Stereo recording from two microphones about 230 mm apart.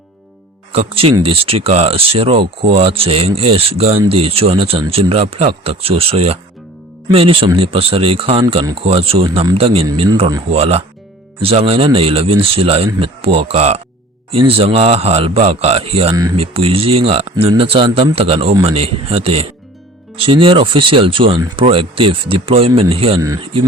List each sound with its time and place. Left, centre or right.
0.7 s speech: right